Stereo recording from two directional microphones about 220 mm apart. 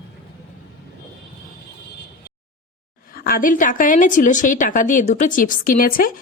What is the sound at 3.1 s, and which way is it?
A woman's voice, 40° left (ahead or behind).